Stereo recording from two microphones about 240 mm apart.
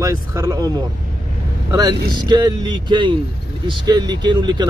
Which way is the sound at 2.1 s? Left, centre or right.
Centre.